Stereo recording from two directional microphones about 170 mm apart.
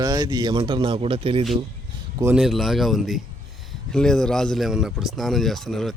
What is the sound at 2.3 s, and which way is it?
Speech, centre (ahead or behind).